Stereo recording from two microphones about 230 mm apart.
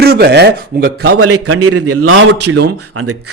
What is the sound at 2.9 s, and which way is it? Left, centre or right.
Speech, right.